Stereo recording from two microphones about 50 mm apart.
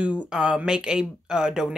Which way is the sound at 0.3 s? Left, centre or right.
Centre.